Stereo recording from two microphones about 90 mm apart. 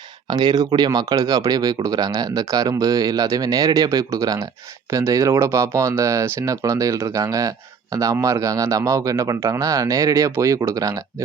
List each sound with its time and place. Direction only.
0.3 s speech: 50° right (ahead or behind)